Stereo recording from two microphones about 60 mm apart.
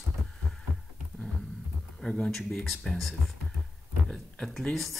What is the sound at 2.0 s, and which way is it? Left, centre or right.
Speech, centre.